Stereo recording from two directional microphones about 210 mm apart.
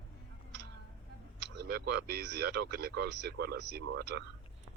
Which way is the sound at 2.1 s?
50° right (ahead or behind).